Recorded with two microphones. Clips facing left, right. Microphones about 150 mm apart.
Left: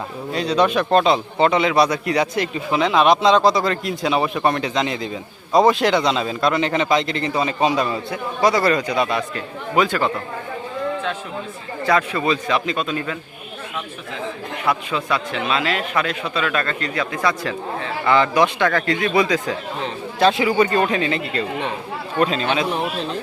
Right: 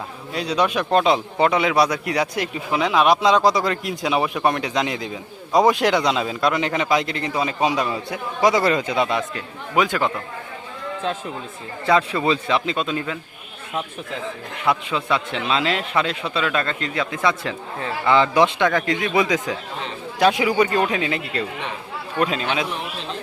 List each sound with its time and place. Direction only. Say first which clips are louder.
0.3 s a man's voice: left 3 dB; 10° right (ahead or behind)
11.9 s a man's voice: right 1 dB; 25° right (ahead or behind)
14.7 s a man's voice: right 1 dB; 25° right (ahead or behind); by 22.4 s 10° right (ahead or behind)